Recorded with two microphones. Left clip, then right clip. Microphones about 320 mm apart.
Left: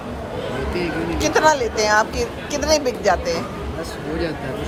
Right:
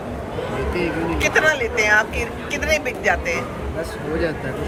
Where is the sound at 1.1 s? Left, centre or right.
Left.